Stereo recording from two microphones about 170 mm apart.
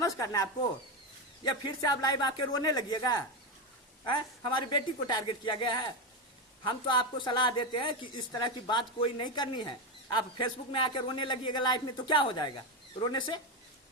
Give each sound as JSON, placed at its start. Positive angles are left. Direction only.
{"t": 0.0, "sound": "speech", "side_deg": 20}
{"t": 1.6, "sound": "a woman's voice", "side_deg": 20}
{"t": 4.5, "sound": "a woman's voice", "side_deg": 25}